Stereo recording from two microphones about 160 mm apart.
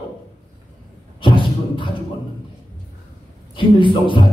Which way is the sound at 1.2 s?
30° left (ahead or behind).